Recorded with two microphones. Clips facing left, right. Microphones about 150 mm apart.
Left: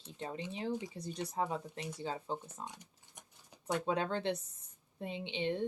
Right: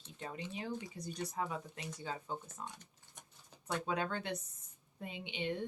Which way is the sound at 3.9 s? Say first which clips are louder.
Left 4 dB; 30° left (ahead or behind).